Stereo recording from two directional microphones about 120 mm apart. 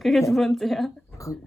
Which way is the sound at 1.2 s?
25° left (ahead or behind).